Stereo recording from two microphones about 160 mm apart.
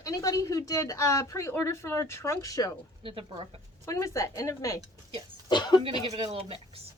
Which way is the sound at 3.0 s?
35° right (ahead or behind).